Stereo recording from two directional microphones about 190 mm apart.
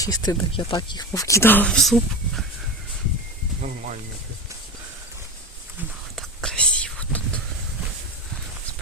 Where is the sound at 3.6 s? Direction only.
45° right (ahead or behind).